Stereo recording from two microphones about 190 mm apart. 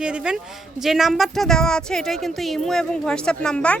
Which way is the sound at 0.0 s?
5° right (ahead or behind).